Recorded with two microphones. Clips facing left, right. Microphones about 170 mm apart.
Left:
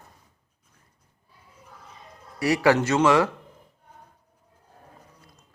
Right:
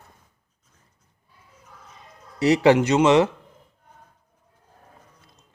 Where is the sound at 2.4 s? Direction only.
25° right (ahead or behind).